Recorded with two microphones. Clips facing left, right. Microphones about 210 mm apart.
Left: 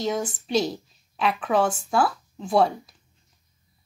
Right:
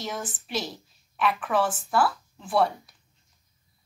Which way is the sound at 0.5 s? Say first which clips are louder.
Left 9 dB; 20° left (ahead or behind).